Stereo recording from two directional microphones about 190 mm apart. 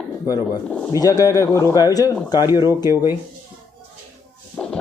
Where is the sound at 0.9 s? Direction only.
20° left (ahead or behind).